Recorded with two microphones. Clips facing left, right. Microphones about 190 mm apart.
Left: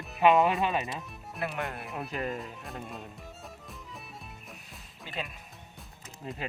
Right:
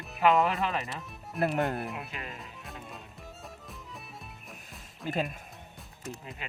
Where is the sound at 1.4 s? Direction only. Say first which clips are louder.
Right 7 dB; 40° right (ahead or behind).